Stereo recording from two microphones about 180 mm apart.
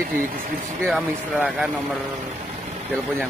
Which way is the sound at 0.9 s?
Centre (ahead or behind).